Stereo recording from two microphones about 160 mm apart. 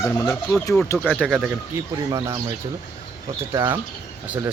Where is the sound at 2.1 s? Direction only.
25° right (ahead or behind).